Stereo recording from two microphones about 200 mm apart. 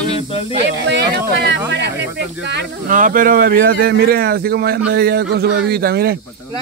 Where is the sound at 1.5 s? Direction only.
65° right (ahead or behind).